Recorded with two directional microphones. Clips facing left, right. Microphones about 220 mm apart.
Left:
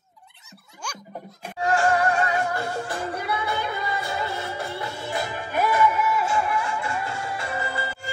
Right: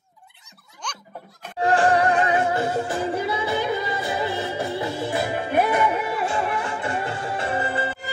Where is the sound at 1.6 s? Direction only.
30° right (ahead or behind).